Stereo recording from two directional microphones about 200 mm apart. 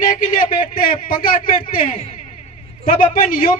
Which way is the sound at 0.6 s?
45° left (ahead or behind).